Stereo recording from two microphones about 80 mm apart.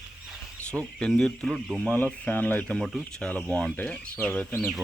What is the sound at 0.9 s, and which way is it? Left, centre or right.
Speech, centre.